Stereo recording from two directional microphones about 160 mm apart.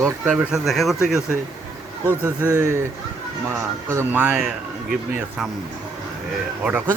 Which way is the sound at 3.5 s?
15° right (ahead or behind).